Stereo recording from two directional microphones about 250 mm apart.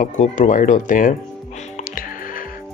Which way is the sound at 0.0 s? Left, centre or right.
Left.